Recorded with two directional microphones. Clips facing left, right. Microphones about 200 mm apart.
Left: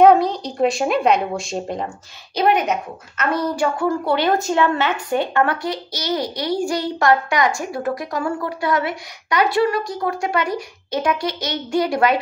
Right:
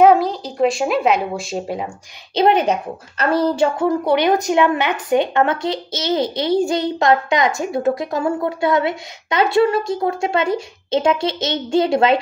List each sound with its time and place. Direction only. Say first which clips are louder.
0.0 s speech: even; centre (ahead or behind)
2.3 s a woman's voice: right 3 dB; 25° right (ahead or behind)